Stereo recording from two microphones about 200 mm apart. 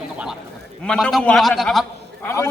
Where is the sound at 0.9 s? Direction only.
5° left (ahead or behind).